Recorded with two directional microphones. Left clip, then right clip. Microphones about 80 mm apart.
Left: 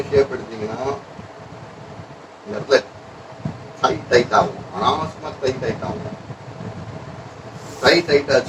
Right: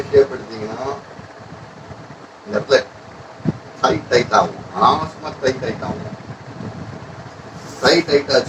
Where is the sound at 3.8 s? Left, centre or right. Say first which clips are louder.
Right 1 dB; right.